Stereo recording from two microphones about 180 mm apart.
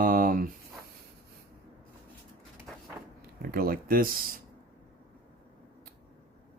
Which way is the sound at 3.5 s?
55° right (ahead or behind).